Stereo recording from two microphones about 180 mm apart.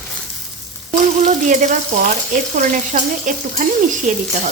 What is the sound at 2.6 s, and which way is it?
Frying, 45° right (ahead or behind).